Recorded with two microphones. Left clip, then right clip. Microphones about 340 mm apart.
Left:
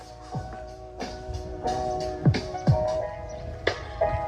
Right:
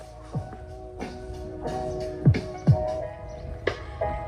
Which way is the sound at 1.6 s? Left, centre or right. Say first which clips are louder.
Left 4 dB; left.